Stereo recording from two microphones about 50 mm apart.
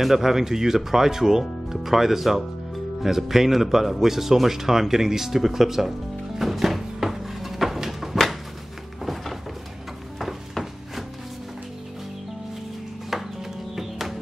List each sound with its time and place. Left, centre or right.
0.0 s speech: centre
3.0 s music: centre
9.0 s a sound: centre
13.1 s music: centre